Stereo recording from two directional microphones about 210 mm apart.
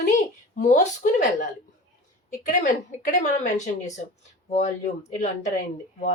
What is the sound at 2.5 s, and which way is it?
Speech, 40° left (ahead or behind).